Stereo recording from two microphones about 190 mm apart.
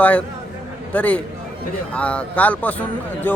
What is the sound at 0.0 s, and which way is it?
A man's voice, 10° left (ahead or behind).